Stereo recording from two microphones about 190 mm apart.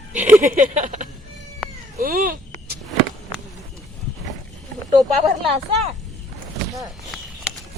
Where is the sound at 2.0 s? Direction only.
50° right (ahead or behind).